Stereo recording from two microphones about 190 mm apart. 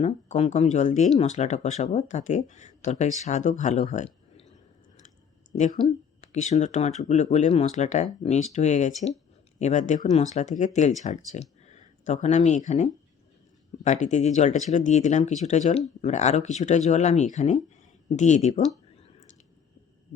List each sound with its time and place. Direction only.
0.0 s speech: 35° left (ahead or behind)
5.5 s speech: 40° left (ahead or behind)